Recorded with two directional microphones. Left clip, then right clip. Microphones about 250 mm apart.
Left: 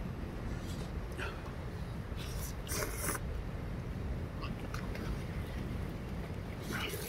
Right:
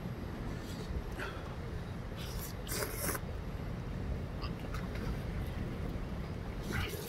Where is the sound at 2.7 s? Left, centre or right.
Centre.